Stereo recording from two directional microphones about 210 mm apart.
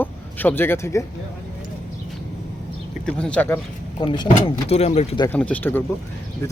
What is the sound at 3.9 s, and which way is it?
Speech, 20° left (ahead or behind).